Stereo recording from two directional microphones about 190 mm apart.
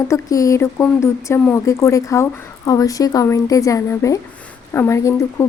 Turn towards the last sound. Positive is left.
turn(degrees=15)  # may be behind; listen again after turning